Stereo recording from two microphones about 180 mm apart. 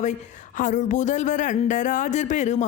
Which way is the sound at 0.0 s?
45° left (ahead or behind).